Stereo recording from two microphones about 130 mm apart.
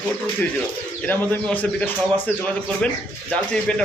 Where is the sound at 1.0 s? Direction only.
15° left (ahead or behind).